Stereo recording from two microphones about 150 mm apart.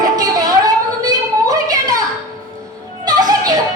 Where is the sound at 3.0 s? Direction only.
25° right (ahead or behind).